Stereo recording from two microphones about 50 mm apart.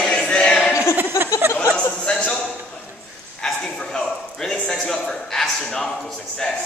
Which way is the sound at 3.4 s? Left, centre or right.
Centre.